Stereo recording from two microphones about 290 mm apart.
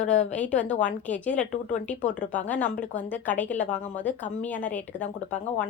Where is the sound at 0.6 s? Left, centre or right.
Left.